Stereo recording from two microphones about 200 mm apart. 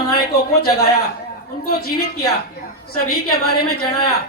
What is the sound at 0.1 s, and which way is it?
Speech, 50° left (ahead or behind).